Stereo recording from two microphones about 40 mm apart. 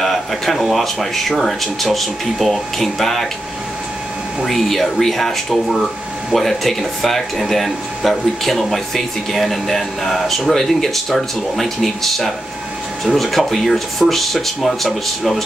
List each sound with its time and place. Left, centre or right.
0.0 s speech: centre
4.5 s speech: centre